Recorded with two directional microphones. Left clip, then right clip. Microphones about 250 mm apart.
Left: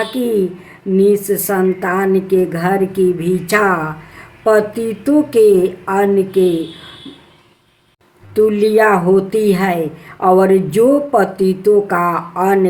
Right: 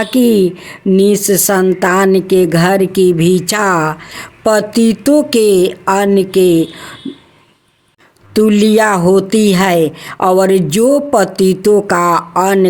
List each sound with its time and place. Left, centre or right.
0.2 s a woman's voice: right
8.3 s a woman's voice: right